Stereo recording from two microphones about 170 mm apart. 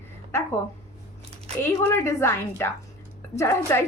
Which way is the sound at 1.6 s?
15° left (ahead or behind).